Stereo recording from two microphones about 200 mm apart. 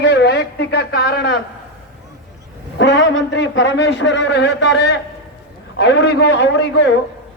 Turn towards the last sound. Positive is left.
turn(degrees=60)  # may be behind; listen again after turning